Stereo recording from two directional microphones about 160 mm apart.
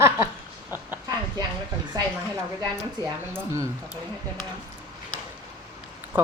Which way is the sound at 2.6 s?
20° right (ahead or behind).